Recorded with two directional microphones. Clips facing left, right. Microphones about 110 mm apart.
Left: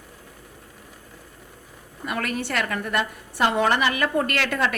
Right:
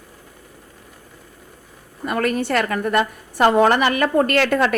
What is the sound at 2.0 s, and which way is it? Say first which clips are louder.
A woman's voice: right 7 dB; 45° right (ahead or behind).